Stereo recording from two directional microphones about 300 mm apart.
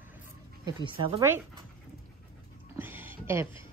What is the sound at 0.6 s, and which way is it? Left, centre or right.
Speech, centre.